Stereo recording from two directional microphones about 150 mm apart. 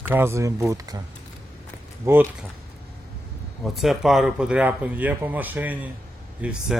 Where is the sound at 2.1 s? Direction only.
15° right (ahead or behind).